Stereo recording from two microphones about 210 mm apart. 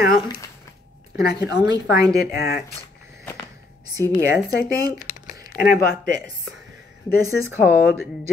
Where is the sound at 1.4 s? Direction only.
50° left (ahead or behind).